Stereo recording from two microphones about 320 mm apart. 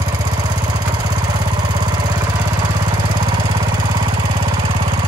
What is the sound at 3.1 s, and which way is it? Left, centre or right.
Lawn mower, centre.